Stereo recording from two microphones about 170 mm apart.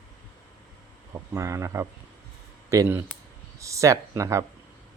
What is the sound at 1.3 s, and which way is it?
Speech, 15° right (ahead or behind).